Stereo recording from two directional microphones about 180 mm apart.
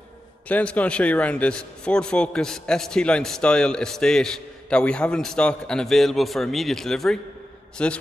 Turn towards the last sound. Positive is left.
turn(degrees=5)  # may be behind; listen again after turning